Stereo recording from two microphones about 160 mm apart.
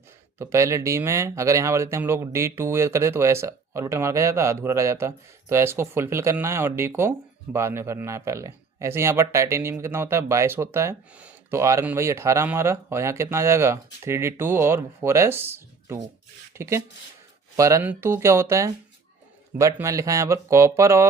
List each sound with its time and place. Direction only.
0.3 s speech: 20° right (ahead or behind)